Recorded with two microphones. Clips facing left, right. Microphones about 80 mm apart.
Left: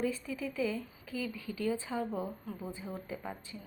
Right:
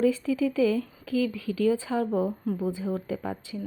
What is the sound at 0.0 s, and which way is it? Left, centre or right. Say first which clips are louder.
Speech: right 11 dB; right.